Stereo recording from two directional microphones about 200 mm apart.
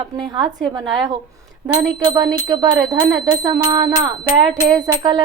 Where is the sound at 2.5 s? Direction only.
20° right (ahead or behind).